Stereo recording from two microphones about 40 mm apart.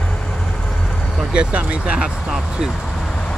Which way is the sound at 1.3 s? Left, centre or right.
Right.